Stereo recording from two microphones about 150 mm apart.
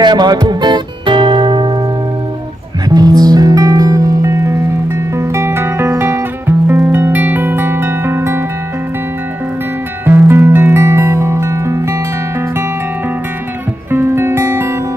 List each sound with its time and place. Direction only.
0.0 s music: 30° right (ahead or behind)
2.9 s music: 25° right (ahead or behind)
10.0 s music: 15° right (ahead or behind)
13.9 s music: 15° right (ahead or behind)